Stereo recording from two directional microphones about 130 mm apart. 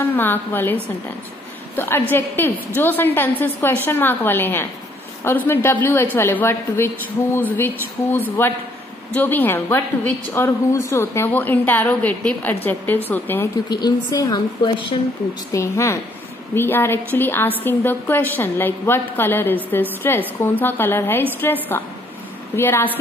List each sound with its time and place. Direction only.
0.0 s a woman's voice: 15° left (ahead or behind)
1.8 s a woman's voice: 15° left (ahead or behind)
13.7 s a woman's voice: 30° left (ahead or behind)
15.5 s a woman's voice: 20° left (ahead or behind)